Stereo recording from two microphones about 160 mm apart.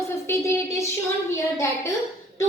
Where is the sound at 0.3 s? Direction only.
15° left (ahead or behind).